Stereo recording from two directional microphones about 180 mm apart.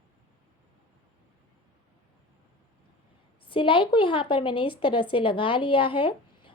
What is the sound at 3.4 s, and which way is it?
A woman's voice, 30° left (ahead or behind).